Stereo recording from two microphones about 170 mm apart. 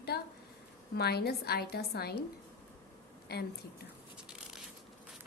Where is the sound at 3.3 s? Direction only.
70° left (ahead or behind).